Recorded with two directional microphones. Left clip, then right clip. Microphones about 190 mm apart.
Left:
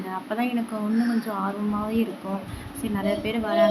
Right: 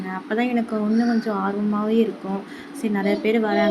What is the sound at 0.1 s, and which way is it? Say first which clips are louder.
A woman's voice: right 4 dB; 15° right (ahead or behind).